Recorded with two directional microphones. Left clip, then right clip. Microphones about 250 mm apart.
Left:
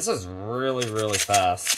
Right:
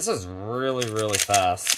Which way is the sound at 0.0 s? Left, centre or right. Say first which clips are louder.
Even; right.